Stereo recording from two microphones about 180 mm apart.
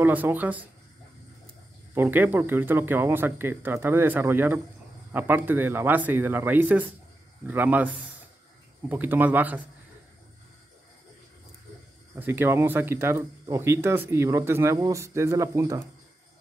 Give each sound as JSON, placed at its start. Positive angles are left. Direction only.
{"t": 0.0, "sound": "speech", "side_deg": -10}
{"t": 2.0, "sound": "speech", "side_deg": -10}
{"t": 12.2, "sound": "speech", "side_deg": -10}